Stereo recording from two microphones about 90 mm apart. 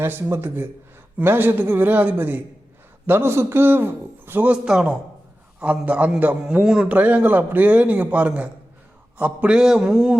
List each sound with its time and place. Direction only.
0.0 s a man's voice: 25° right (ahead or behind); by 10.2 s 5° right (ahead or behind)